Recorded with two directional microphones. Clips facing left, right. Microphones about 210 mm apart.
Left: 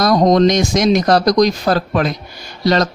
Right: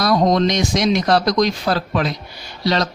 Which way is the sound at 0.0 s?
45° left (ahead or behind).